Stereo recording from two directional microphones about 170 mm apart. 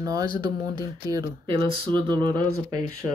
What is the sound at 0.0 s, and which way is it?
Speech, 20° right (ahead or behind).